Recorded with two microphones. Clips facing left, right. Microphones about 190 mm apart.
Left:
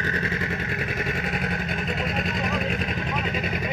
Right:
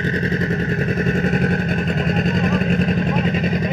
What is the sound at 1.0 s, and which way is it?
Vehicle, 45° right (ahead or behind).